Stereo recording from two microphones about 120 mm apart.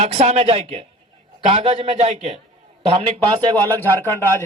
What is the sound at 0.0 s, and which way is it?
Speech, 70° right (ahead or behind).